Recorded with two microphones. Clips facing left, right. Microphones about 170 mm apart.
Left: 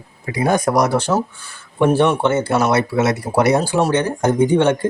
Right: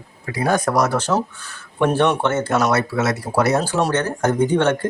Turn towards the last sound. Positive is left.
turn(degrees=10)  # may be behind; listen again after turning